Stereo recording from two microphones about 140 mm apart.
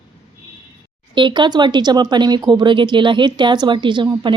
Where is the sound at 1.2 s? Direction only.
35° right (ahead or behind).